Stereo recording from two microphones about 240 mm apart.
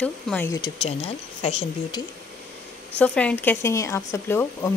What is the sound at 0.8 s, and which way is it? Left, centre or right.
A woman's voice, left.